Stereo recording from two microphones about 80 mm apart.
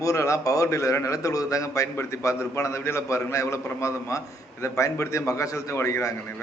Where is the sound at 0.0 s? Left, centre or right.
Left.